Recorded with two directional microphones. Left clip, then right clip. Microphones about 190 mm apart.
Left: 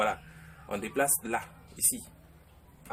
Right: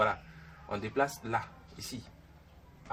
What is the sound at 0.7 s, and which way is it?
Speech, 30° left (ahead or behind).